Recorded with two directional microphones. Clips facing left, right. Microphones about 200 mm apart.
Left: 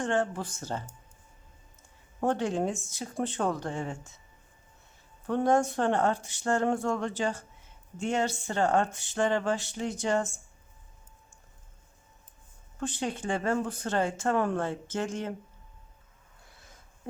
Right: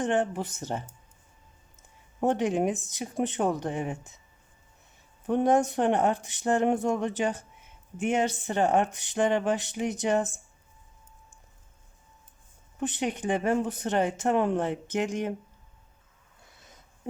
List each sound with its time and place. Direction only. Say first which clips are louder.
0.0 s speech: right 2 dB; 20° right (ahead or behind)
2.2 s speech: right 3 dB; 20° right (ahead or behind)
5.2 s speech: right 2 dB; 20° right (ahead or behind)
12.8 s speech: right 3 dB; 20° right (ahead or behind)